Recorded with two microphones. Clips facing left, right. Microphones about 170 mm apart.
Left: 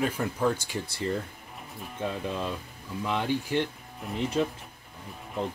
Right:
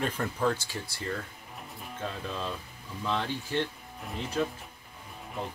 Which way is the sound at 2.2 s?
15° left (ahead or behind).